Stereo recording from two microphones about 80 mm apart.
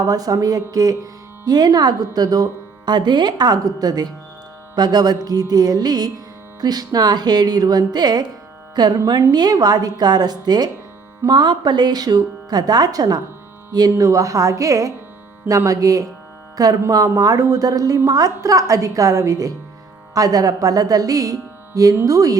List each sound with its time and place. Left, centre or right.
0.0 s a woman's voice: right
13.9 s a woman's voice: right